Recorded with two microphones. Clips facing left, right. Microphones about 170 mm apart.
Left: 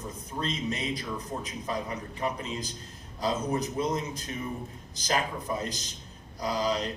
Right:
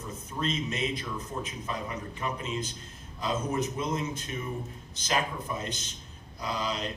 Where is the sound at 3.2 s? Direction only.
35° left (ahead or behind).